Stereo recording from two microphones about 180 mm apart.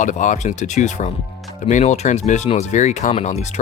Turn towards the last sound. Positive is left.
turn(degrees=40)  # may be behind; listen again after turning